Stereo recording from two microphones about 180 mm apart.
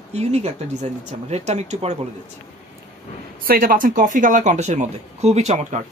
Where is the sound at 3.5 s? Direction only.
55° right (ahead or behind).